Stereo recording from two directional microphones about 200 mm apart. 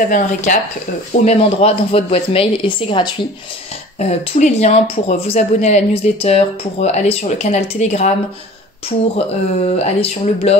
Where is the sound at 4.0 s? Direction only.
35° left (ahead or behind).